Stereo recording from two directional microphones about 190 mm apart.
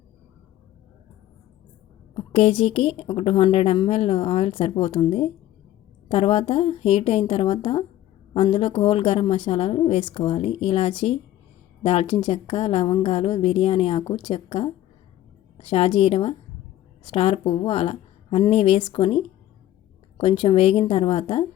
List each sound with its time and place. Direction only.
2.1 s a woman's voice: 30° left (ahead or behind)